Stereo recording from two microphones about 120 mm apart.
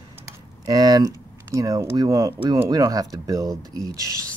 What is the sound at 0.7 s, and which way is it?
Speech, 35° right (ahead or behind).